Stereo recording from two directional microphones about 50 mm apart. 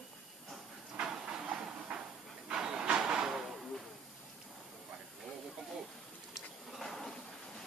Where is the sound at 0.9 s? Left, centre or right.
Centre.